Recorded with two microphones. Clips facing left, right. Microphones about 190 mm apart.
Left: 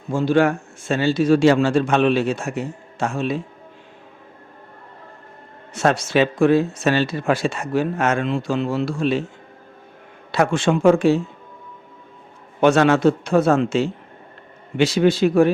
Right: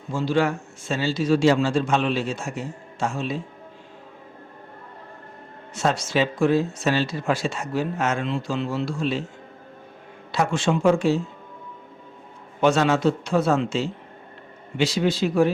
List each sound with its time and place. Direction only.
0.1 s speech: 55° left (ahead or behind)
5.7 s speech: 65° left (ahead or behind)
10.3 s speech: 55° left (ahead or behind)
12.5 s speech: 60° left (ahead or behind)